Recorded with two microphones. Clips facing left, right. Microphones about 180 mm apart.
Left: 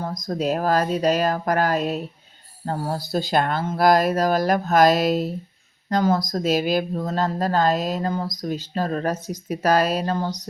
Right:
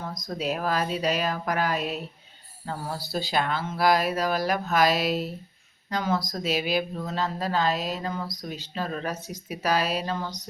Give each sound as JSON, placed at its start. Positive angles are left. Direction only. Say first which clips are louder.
{"t": 0.0, "sound": "speech", "louder": "left 6 dB", "side_deg": 40}